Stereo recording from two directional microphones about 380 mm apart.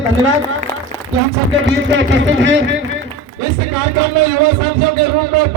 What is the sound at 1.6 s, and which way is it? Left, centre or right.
Speech, right.